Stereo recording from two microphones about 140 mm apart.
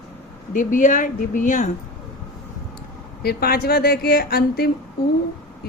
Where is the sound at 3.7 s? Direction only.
90° left.